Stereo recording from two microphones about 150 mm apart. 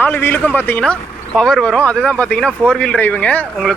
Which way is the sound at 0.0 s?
10° left (ahead or behind).